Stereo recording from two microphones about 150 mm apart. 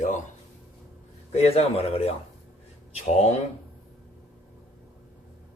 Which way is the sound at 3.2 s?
45° left (ahead or behind).